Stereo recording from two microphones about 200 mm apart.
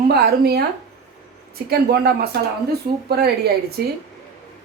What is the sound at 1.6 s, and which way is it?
Speech, 55° right (ahead or behind).